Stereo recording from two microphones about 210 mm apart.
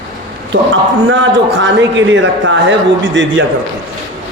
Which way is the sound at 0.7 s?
65° right (ahead or behind).